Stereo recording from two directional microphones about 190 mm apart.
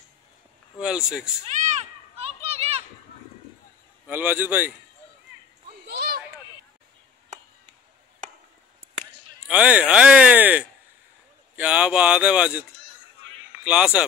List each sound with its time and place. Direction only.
0.7 s speech: 5° right (ahead or behind)
1.4 s a sound: 35° right (ahead or behind)
4.1 s speech: 10° right (ahead or behind)
5.9 s a sound: 55° right (ahead or behind)
9.5 s speech: 5° right (ahead or behind)
13.7 s speech: 5° right (ahead or behind)